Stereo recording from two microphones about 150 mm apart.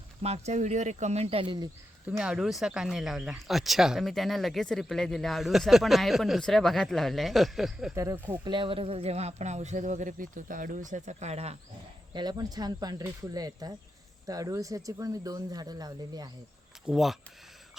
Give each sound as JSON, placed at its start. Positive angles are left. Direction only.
{"t": 0.2, "sound": "speech", "side_deg": -45}
{"t": 2.0, "sound": "speech", "side_deg": -5}
{"t": 7.9, "sound": "speech", "side_deg": -15}
{"t": 8.4, "sound": "speech", "side_deg": -35}
{"t": 12.1, "sound": "speech", "side_deg": -25}
{"t": 16.8, "sound": "speech", "side_deg": 0}